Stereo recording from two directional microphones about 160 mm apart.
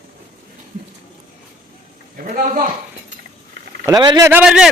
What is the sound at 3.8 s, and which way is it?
Speech, 25° right (ahead or behind).